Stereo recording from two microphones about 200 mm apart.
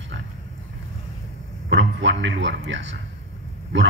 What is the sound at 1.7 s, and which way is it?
A man's voice, 65° right (ahead or behind).